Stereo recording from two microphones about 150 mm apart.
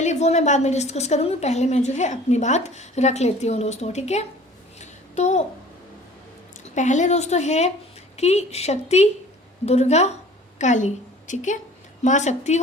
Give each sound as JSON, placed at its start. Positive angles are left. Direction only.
{"t": 0.0, "sound": "a woman's voice", "side_deg": 50}
{"t": 4.8, "sound": "a sound", "side_deg": 50}
{"t": 6.7, "sound": "a woman's voice", "side_deg": 50}